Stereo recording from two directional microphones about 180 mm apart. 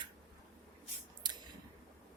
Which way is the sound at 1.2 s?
25° right (ahead or behind).